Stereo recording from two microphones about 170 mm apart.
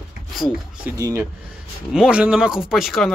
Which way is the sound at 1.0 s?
15° right (ahead or behind).